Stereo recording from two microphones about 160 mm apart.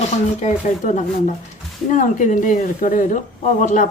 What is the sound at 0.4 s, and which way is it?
Speech, 50° left (ahead or behind).